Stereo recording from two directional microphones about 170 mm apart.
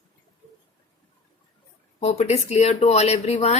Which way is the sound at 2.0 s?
40° left (ahead or behind).